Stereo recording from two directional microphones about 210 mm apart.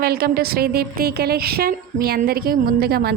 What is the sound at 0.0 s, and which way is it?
Speech, 45° right (ahead or behind).